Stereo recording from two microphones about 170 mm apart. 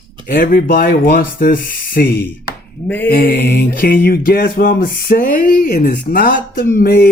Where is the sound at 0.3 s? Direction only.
55° left (ahead or behind).